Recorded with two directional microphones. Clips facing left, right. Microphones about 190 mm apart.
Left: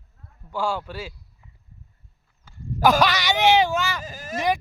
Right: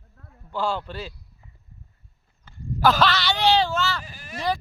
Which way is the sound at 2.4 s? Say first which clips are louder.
Left 1 dB; 15° left (ahead or behind).